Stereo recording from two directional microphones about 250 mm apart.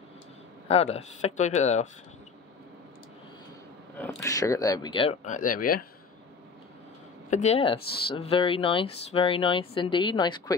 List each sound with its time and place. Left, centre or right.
0.7 s speech: left
4.0 s speech: centre; by 5.9 s left
7.2 s speech: left